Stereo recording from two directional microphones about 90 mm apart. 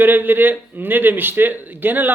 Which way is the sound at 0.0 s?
20° right (ahead or behind).